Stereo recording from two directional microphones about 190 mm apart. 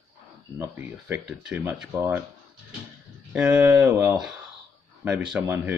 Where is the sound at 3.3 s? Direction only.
5° right (ahead or behind).